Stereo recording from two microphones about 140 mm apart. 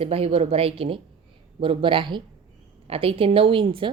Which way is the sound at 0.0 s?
45° right (ahead or behind).